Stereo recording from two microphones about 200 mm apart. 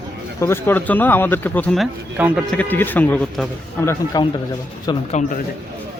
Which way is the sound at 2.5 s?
10° left (ahead or behind).